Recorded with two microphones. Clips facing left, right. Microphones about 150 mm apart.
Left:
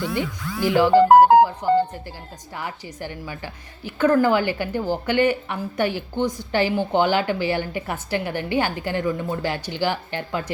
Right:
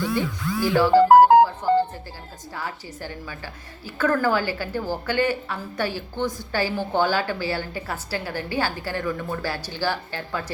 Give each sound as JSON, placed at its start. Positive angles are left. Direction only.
{"t": 0.1, "sound": "a woman's voice", "side_deg": 15}